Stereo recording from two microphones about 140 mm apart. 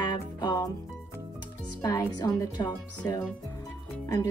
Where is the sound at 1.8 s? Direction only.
25° left (ahead or behind).